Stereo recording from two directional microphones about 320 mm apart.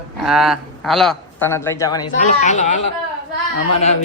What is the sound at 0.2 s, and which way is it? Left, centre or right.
Speech, centre.